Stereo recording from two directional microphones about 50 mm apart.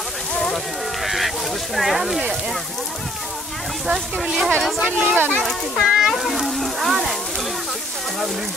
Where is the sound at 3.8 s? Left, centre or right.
Centre.